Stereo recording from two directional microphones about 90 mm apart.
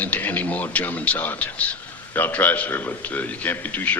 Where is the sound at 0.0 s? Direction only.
20° left (ahead or behind).